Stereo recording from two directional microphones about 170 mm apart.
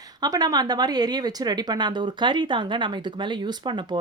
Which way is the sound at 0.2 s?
25° right (ahead or behind).